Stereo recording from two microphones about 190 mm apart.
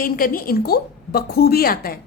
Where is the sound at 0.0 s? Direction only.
50° left (ahead or behind).